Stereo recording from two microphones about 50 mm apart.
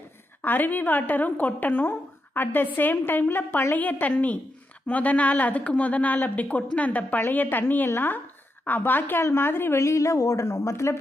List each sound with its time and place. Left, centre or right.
0.4 s a woman's voice: left
7.2 s a woman's voice: left
9.2 s a woman's voice: left
9.8 s a woman's voice: left